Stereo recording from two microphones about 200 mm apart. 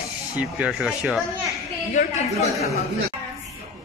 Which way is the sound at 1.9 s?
35° left (ahead or behind).